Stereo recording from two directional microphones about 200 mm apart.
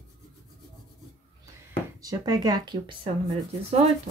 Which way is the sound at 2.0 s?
20° right (ahead or behind).